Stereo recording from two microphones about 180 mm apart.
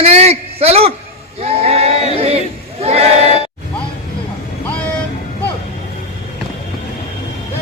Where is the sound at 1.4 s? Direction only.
35° right (ahead or behind).